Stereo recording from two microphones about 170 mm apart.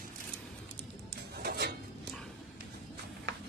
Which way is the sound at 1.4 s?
65° right (ahead or behind).